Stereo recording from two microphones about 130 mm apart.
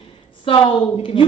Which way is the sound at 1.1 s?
40° left (ahead or behind).